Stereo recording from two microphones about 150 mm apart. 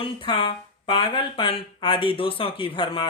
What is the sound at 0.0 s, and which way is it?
A man's voice, 35° left (ahead or behind).